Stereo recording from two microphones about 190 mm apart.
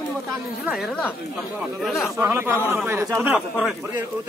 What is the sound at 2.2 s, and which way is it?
Speech, 10° right (ahead or behind).